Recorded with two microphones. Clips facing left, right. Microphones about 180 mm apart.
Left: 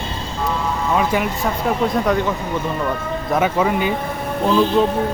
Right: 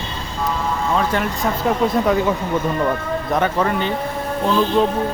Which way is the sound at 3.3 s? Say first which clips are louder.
Left 2 dB; 5° left (ahead or behind).